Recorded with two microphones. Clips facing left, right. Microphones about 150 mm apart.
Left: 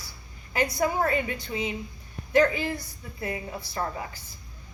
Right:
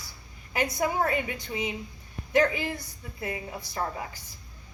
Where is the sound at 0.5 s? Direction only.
15° right (ahead or behind).